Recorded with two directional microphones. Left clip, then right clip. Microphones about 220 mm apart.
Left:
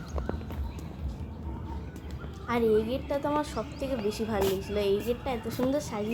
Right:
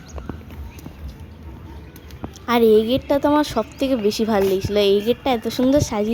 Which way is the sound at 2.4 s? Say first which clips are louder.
Right 11 dB; 45° right (ahead or behind).